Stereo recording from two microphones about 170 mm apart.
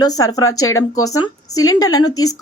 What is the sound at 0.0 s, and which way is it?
A woman's voice, 20° left (ahead or behind).